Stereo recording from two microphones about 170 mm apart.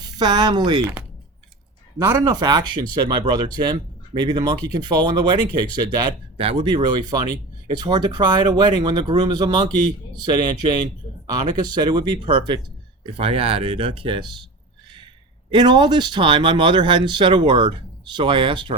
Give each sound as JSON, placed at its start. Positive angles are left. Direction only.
{"t": 0.0, "sound": "speech", "side_deg": -25}
{"t": 2.0, "sound": "speech", "side_deg": -20}
{"t": 15.4, "sound": "speech", "side_deg": -25}